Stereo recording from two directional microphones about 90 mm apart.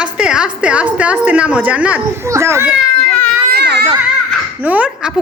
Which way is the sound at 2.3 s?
30° right (ahead or behind).